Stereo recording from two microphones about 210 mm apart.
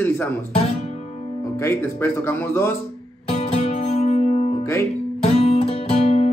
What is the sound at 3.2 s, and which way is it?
Music, 30° left (ahead or behind).